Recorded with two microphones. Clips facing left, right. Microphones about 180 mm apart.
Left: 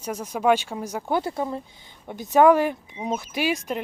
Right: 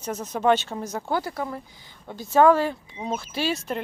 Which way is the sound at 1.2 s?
25° left (ahead or behind).